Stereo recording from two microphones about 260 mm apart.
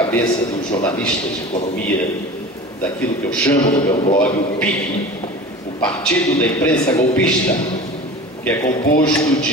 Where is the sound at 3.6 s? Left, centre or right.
Centre.